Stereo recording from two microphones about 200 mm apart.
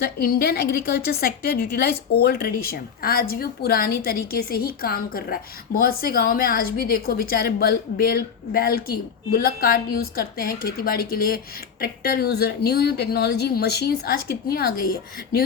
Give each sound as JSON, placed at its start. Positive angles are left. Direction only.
{"t": 0.0, "sound": "a woman's voice", "side_deg": 50}